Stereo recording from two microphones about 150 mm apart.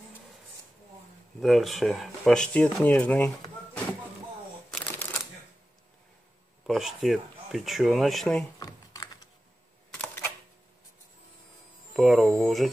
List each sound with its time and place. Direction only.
1.4 s speech: centre (ahead or behind)
6.6 s speech: centre (ahead or behind)
8.5 s computer keyboard: 25° left (ahead or behind)
11.9 s speech: centre (ahead or behind)